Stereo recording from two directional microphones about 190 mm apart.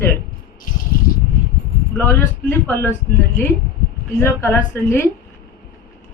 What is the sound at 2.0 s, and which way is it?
Speech, 10° left (ahead or behind).